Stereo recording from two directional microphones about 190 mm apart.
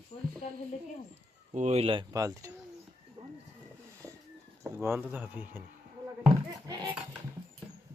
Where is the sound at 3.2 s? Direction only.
30° right (ahead or behind).